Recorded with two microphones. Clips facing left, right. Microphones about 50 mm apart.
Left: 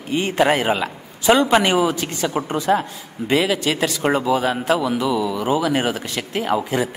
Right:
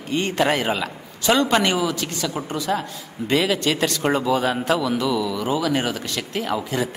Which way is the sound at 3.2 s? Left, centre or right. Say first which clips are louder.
Left 1 dB; centre.